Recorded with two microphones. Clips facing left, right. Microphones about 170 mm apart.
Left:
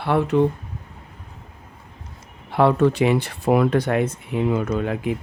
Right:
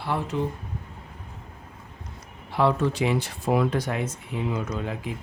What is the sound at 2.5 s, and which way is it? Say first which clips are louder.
Speech: left 6 dB; 60° left (ahead or behind).